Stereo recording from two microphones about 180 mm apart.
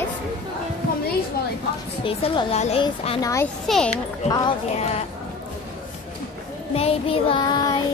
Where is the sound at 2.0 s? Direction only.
30° left (ahead or behind).